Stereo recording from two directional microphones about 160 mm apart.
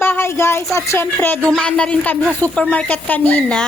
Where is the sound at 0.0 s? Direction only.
15° left (ahead or behind).